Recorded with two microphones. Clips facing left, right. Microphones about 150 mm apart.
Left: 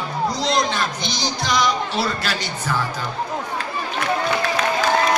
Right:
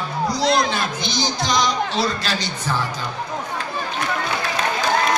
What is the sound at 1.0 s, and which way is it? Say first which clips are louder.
Speech: right 2 dB; 5° left (ahead or behind).